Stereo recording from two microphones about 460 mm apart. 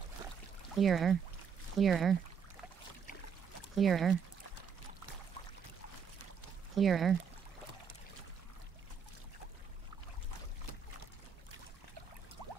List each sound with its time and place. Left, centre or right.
0.7 s speech: centre
3.7 s speech: centre
6.7 s speech: centre
12.4 s a sound: right